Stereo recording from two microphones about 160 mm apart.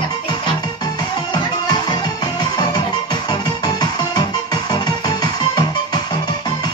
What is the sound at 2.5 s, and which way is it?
Music, 25° left (ahead or behind).